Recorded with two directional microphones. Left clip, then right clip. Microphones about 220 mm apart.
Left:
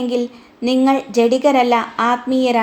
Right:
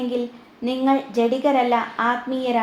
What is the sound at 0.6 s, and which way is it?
A woman's voice, 50° left (ahead or behind).